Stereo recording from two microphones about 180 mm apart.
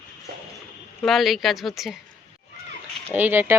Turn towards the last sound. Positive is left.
turn(degrees=-10)  # may be behind; listen again after turning